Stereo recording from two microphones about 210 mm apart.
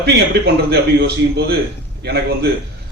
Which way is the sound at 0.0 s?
50° right (ahead or behind).